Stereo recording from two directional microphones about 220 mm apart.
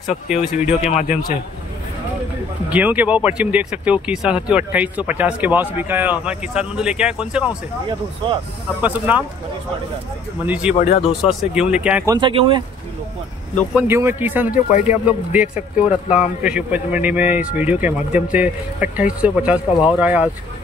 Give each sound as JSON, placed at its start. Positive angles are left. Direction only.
{"t": 0.8, "sound": "speech", "side_deg": 30}
{"t": 2.7, "sound": "speech", "side_deg": -5}
{"t": 8.8, "sound": "speech", "side_deg": -5}
{"t": 10.4, "sound": "speech", "side_deg": -5}
{"t": 10.7, "sound": "speech", "side_deg": 30}
{"t": 11.1, "sound": "speech", "side_deg": -5}
{"t": 12.1, "sound": "speech", "side_deg": -20}
{"t": 13.7, "sound": "speech", "side_deg": -10}
{"t": 14.5, "sound": "speech", "side_deg": 35}
{"t": 15.0, "sound": "speech", "side_deg": -5}